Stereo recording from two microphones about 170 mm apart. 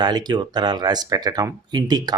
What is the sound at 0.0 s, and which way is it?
Speech, 25° right (ahead or behind).